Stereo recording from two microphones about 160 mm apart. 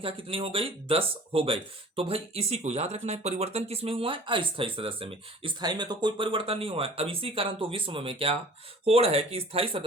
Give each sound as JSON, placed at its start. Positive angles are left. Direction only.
{"t": 0.0, "sound": "speech", "side_deg": -35}